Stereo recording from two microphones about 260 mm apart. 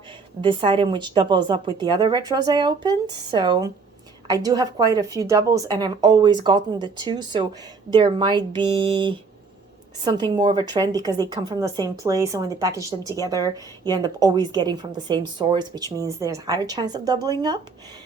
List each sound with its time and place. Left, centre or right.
0.4 s a woman's voice: centre